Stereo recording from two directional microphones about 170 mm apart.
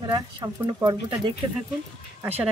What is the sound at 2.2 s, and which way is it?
Speech, 10° right (ahead or behind).